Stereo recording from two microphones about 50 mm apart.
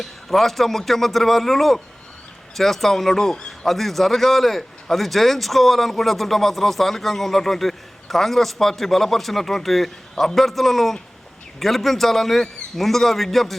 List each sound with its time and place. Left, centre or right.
0.0 s a man's voice: centre